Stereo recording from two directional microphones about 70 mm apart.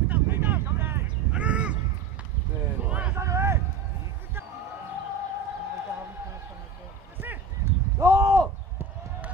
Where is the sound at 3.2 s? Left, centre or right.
Right.